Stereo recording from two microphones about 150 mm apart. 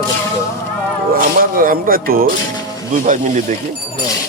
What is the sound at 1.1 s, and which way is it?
Speech, 70° right (ahead or behind).